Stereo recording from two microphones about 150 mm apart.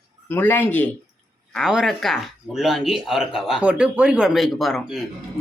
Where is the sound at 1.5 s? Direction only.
Centre (ahead or behind).